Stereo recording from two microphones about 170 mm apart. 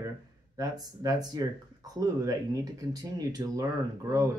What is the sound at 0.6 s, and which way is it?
Speech, 20° right (ahead or behind).